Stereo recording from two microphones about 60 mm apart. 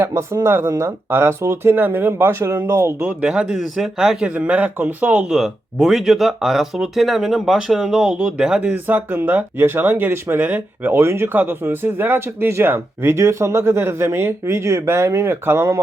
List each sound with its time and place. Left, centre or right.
0.0 s speech: right
0.6 s speech: right
0.9 s speech: right
1.7 s speech: right
3.0 s speech: centre
3.5 s speech: centre
4.4 s speech: right
8.7 s speech: right
11.0 s speech: right